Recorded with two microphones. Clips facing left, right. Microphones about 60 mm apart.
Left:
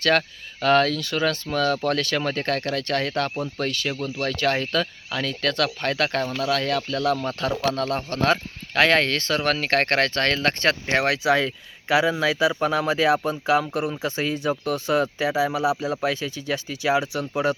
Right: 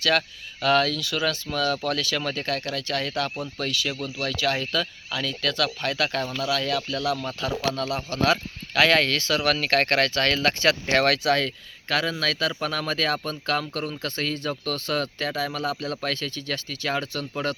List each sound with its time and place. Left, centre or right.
0.0 s speech: left
10.8 s speech: centre